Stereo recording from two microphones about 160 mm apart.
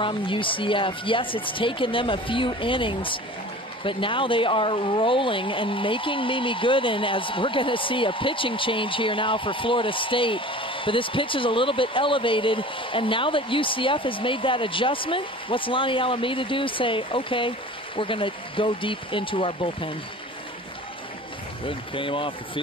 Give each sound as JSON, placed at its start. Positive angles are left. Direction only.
{"t": 0.0, "sound": "speech", "side_deg": 30}
{"t": 21.6, "sound": "speech", "side_deg": 35}